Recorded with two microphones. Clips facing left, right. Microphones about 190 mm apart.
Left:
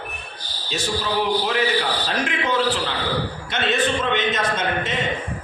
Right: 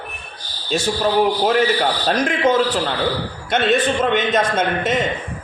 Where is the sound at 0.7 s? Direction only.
45° right (ahead or behind).